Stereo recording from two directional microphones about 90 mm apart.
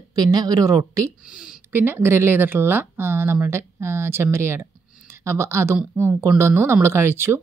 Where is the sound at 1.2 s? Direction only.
10° right (ahead or behind).